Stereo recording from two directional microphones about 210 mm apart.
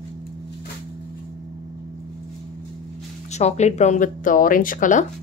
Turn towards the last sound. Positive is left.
turn(degrees=40)  # may be behind; listen again after turning